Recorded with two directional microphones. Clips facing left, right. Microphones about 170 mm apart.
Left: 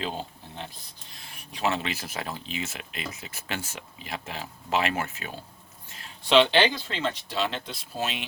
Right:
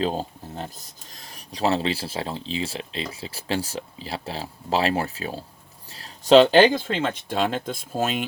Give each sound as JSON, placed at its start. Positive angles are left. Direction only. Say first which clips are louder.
{"t": 0.0, "sound": "speech", "louder": "right 8 dB", "side_deg": -40}